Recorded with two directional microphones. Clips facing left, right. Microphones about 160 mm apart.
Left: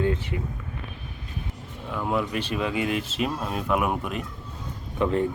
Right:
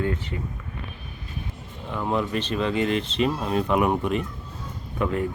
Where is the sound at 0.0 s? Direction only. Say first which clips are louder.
Left 2 dB; 20° left (ahead or behind).